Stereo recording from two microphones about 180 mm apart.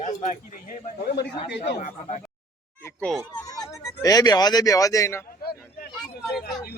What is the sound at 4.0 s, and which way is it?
Speech, 20° left (ahead or behind).